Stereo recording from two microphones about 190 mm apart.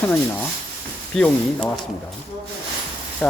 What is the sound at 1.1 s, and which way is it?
Speech, 5° left (ahead or behind).